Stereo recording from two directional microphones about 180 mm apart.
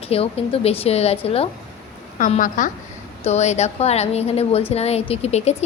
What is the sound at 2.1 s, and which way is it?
A woman's voice, 45° left (ahead or behind).